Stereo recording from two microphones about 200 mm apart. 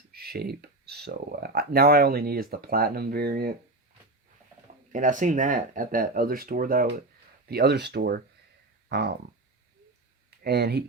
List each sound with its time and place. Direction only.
0.1 s speech: 50° right (ahead or behind)
4.9 s speech: 40° right (ahead or behind)
10.4 s speech: 55° right (ahead or behind)